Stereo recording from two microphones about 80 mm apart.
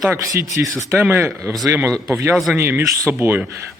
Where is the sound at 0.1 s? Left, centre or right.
Right.